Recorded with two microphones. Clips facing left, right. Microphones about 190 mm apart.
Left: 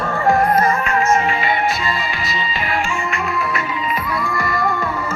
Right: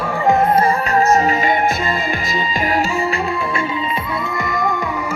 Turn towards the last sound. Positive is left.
turn(degrees=-20)  # may be behind; listen again after turning